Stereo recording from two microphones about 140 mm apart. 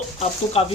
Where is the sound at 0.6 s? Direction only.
45° left (ahead or behind).